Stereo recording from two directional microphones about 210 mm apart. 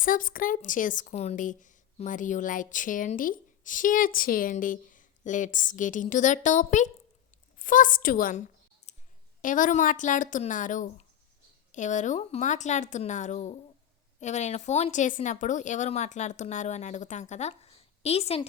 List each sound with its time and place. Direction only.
0.0 s a woman's voice: 40° left (ahead or behind)
8.9 s clicking: 30° left (ahead or behind)
9.4 s a woman's voice: 40° left (ahead or behind)